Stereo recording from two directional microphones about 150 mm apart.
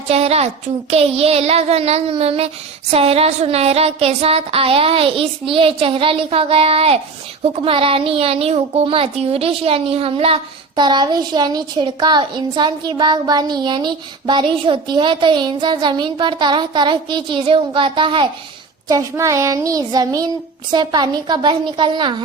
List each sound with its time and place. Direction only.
0.1 s child singing: 45° right (ahead or behind)
2.9 s speech: 40° right (ahead or behind)
18.9 s child singing: 20° right (ahead or behind)